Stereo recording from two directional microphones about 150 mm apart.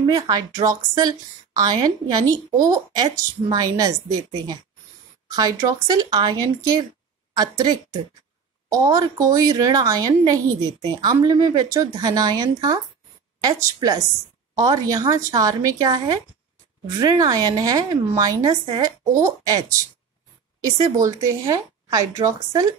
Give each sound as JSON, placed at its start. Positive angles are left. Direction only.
{"t": 0.0, "sound": "a woman's voice", "side_deg": -25}
{"t": 5.3, "sound": "a woman's voice", "side_deg": -25}
{"t": 20.7, "sound": "a woman's voice", "side_deg": -20}